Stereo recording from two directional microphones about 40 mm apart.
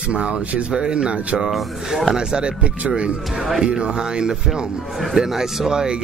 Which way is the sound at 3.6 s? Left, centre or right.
Right.